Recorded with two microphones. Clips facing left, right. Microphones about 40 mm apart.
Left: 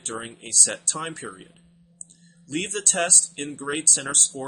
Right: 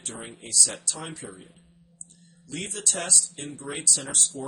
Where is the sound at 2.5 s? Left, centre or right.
Left.